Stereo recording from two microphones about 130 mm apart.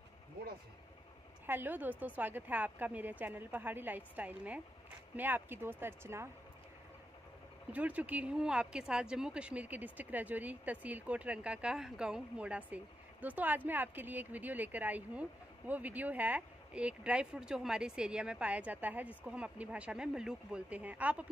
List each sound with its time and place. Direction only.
1.4 s speech: 15° right (ahead or behind)
7.7 s speech: 10° right (ahead or behind)